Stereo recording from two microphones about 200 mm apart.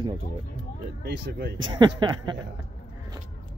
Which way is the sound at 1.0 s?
55° right (ahead or behind).